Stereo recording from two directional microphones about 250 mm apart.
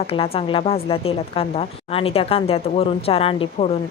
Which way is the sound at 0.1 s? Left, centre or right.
Left.